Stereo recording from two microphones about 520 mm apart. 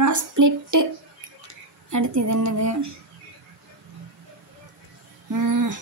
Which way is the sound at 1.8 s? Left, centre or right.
Right.